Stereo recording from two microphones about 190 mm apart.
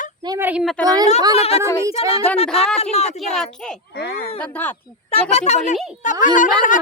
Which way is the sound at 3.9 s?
55° left (ahead or behind).